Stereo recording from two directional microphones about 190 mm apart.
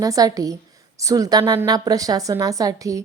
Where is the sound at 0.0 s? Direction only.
20° right (ahead or behind).